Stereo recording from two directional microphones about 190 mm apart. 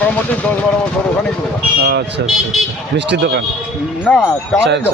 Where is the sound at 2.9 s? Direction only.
65° right (ahead or behind).